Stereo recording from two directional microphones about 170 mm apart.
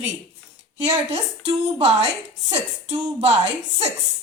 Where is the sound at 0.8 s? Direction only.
35° right (ahead or behind).